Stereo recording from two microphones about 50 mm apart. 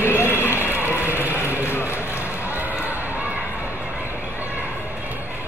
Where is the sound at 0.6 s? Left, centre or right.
Right.